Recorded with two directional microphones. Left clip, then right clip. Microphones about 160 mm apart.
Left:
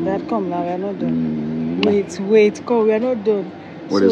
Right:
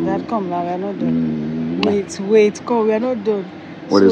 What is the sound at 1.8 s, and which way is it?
Speech, 25° left (ahead or behind).